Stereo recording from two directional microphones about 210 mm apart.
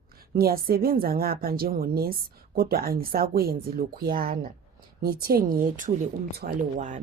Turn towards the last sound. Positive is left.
turn(degrees=-35)  # may be behind; listen again after turning